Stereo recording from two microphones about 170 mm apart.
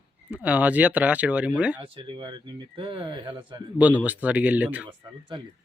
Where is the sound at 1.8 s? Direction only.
30° right (ahead or behind).